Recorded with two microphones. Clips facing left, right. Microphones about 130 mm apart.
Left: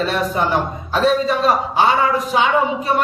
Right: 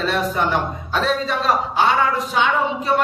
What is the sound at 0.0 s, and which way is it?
A man's voice, centre (ahead or behind).